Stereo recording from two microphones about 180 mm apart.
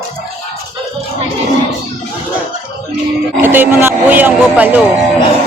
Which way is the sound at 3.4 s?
10° right (ahead or behind).